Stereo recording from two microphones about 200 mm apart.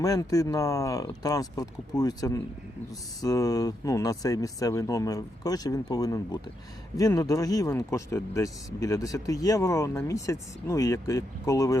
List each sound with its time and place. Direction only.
0.0 s speech: 15° left (ahead or behind)